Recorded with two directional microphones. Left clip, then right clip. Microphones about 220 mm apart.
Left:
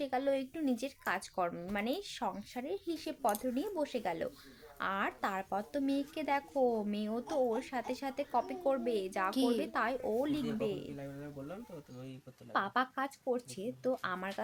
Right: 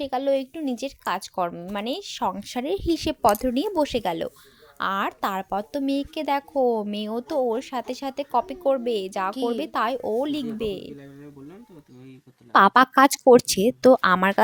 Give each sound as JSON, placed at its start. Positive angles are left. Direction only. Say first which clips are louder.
{"t": 0.0, "sound": "a woman's voice", "louder": "right 10 dB", "side_deg": -30}
{"t": 9.3, "sound": "speech", "louder": "right 7 dB", "side_deg": 0}
{"t": 9.6, "sound": "a woman's voice", "louder": "right 10 dB", "side_deg": -30}
{"t": 12.5, "sound": "speech", "louder": "right 18 dB", "side_deg": -55}